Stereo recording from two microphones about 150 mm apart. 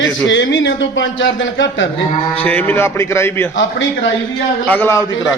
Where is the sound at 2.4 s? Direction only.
10° left (ahead or behind).